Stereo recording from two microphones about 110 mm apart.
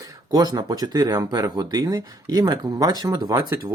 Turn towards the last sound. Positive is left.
turn(degrees=-35)  # may be behind; listen again after turning